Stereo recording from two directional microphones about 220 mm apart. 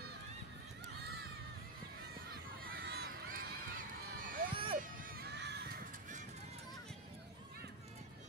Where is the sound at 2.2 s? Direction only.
45° right (ahead or behind).